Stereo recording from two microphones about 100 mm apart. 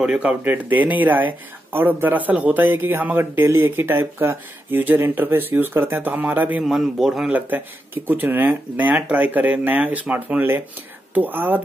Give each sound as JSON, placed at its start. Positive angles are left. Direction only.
{"t": 0.0, "sound": "speech", "side_deg": -10}
{"t": 6.6, "sound": "a man's voice", "side_deg": -5}
{"t": 7.3, "sound": "speech", "side_deg": -20}